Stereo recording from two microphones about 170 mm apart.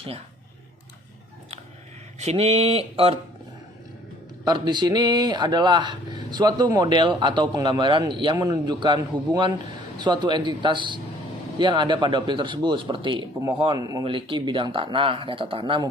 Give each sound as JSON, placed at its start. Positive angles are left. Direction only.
{"t": 2.1, "sound": "speech", "side_deg": -40}
{"t": 4.4, "sound": "speech", "side_deg": -25}